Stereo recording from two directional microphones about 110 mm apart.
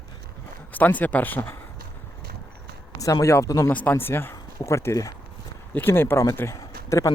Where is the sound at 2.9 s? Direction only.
30° left (ahead or behind).